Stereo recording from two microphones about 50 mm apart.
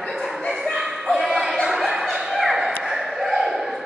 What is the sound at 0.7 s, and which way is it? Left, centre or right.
Bow-wow, centre.